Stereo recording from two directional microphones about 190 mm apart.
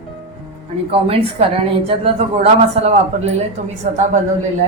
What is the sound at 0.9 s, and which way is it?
A woman's voice, 30° right (ahead or behind).